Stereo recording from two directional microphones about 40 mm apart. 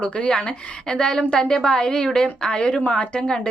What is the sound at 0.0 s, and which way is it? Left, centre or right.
A woman's voice, left.